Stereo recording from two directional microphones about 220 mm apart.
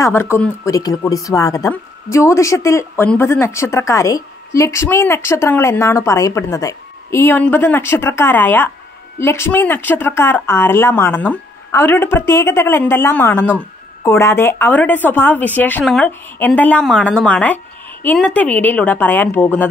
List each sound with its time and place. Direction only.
0.0 s speech: 10° left (ahead or behind)